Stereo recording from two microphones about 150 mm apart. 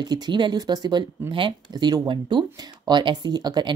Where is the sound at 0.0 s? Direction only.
30° right (ahead or behind).